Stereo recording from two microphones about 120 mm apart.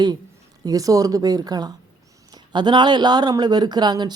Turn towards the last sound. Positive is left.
turn(degrees=-35)  # may be behind; listen again after turning